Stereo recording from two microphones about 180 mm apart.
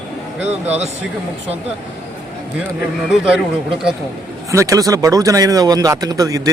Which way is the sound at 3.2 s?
5° right (ahead or behind).